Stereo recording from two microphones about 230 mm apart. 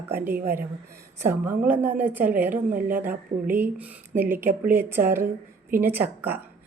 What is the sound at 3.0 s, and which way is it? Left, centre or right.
A woman's voice, centre.